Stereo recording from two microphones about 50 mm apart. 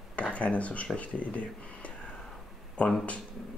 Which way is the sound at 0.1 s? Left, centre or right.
Left.